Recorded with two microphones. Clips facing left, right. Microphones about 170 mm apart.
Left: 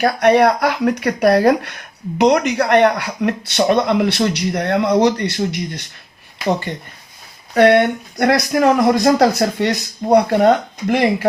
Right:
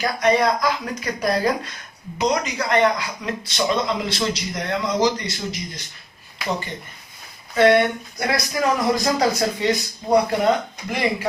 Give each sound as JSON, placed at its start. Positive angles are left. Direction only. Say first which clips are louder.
{"t": 0.0, "sound": "speech", "louder": "left 6 dB", "side_deg": 65}
{"t": 7.5, "sound": "speech", "louder": "left 4 dB", "side_deg": 65}